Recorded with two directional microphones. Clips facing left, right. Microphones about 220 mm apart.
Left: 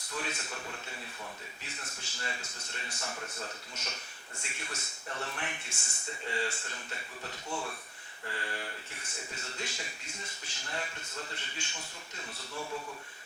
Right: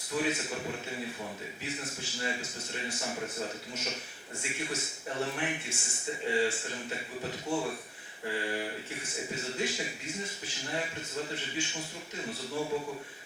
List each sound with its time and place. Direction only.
0.1 s speech: 5° right (ahead or behind)
3.2 s speech: 15° right (ahead or behind)
4.4 s speech: 5° right (ahead or behind)